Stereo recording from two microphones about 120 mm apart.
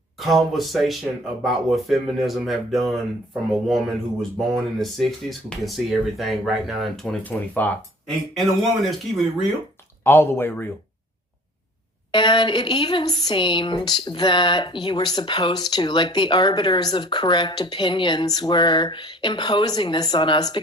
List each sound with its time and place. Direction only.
0.2 s speech: centre (ahead or behind)
7.3 s speech: 15° left (ahead or behind)
8.0 s speech: centre (ahead or behind)
10.0 s speech: 20° left (ahead or behind)
12.1 s speech: 40° left (ahead or behind)